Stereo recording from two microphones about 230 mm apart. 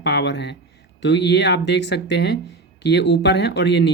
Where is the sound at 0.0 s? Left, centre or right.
Left.